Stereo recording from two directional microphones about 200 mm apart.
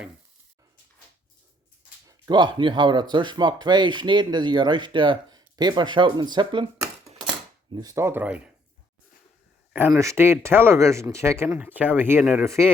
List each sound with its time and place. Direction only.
2.0 s speech: 20° right (ahead or behind)
9.7 s speech: 10° right (ahead or behind)